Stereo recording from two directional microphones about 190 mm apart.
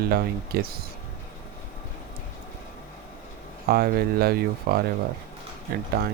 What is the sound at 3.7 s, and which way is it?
Speech, 55° right (ahead or behind).